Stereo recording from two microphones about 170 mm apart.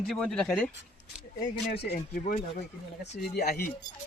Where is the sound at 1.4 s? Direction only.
65° left (ahead or behind).